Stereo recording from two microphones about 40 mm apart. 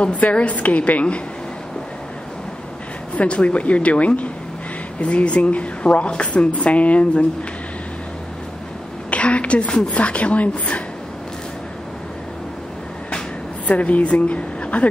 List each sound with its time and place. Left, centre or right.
0.0 s speech: left
3.2 s speech: left
9.1 s a sound: left
9.8 s speech: left
13.7 s speech: left